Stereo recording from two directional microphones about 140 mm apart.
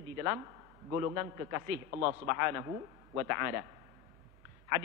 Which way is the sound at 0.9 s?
20° right (ahead or behind).